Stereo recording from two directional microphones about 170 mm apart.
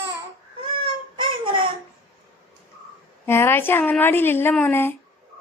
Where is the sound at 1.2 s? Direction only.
30° right (ahead or behind).